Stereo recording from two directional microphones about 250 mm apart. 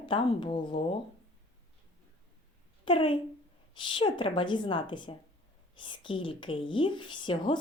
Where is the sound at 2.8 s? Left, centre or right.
Left.